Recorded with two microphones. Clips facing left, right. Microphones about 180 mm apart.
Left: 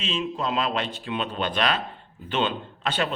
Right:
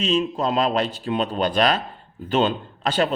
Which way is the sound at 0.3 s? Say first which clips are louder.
Right 5 dB; 40° right (ahead or behind).